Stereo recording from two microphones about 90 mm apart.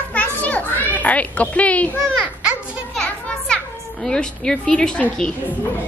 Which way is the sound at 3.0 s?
10° left (ahead or behind).